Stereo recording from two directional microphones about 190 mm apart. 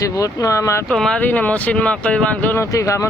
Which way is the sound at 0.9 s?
Centre (ahead or behind).